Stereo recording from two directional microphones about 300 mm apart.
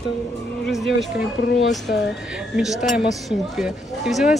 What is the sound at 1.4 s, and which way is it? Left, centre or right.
Speech, left.